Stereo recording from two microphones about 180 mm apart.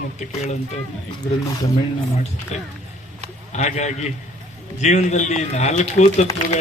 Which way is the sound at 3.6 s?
40° left (ahead or behind).